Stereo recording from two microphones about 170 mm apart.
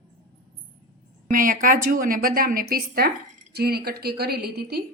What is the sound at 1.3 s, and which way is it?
A woman's voice, 55° right (ahead or behind).